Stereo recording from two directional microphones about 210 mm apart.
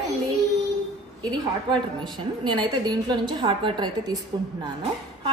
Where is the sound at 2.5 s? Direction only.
20° right (ahead or behind).